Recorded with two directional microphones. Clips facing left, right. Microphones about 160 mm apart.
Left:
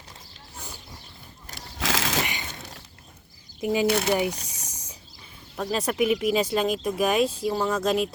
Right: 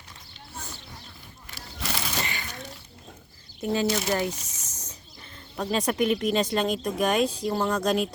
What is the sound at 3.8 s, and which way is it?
Speech, 60° left (ahead or behind).